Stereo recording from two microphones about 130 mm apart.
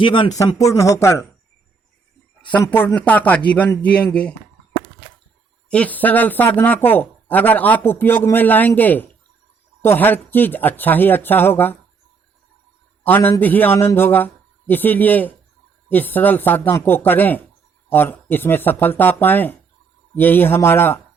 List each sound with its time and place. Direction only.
0.0 s speech: 40° left (ahead or behind)
0.3 s speech: 25° left (ahead or behind)
2.5 s speech: 10° left (ahead or behind)
5.7 s speech: 10° left (ahead or behind)
13.1 s speech: 15° left (ahead or behind)